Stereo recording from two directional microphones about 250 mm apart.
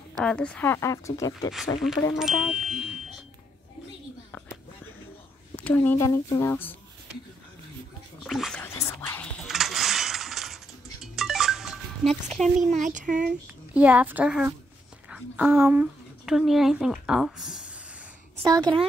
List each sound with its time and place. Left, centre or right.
0.2 s speech: centre
2.1 s music: centre
5.6 s speech: centre
8.3 s a sound: centre
12.5 s speech: right
13.7 s music: centre
15.0 s a woman's voice: centre
18.3 s a sound: centre